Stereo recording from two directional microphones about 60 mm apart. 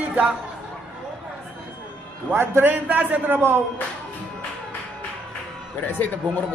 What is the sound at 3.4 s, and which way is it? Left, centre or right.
Speech, right.